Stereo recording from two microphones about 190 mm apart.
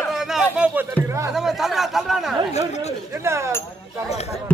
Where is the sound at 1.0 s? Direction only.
15° right (ahead or behind).